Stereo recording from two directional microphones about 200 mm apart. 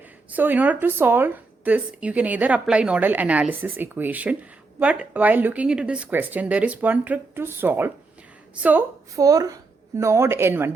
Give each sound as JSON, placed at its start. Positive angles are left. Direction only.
{"t": 0.3, "sound": "speech", "side_deg": -10}